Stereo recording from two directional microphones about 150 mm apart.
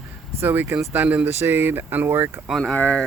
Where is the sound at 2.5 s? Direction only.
5° left (ahead or behind).